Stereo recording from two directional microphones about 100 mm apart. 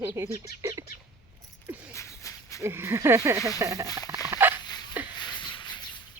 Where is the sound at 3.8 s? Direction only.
40° left (ahead or behind).